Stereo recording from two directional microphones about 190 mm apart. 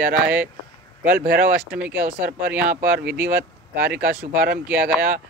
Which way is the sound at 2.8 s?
55° right (ahead or behind).